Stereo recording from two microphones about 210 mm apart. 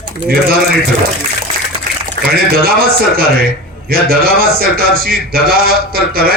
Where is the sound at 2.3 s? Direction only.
45° right (ahead or behind).